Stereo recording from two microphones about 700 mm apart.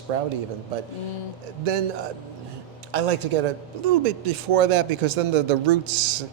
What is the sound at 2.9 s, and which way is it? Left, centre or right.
A man's voice, right.